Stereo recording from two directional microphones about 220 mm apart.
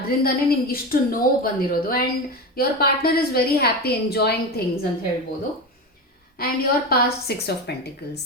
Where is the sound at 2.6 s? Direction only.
45° left (ahead or behind).